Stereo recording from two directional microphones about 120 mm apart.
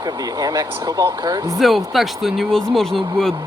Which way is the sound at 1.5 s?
Centre (ahead or behind).